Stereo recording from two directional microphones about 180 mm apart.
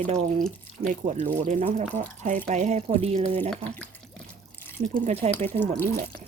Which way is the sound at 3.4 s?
10° left (ahead or behind).